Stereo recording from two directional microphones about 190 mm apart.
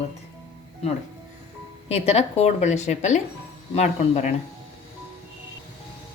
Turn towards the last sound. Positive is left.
turn(degrees=35)  # may be behind; listen again after turning